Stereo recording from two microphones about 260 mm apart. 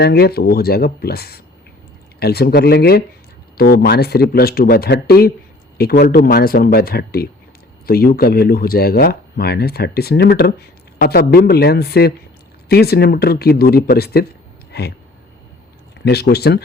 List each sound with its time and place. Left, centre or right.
0.0 s speech: left
16.0 s speech: left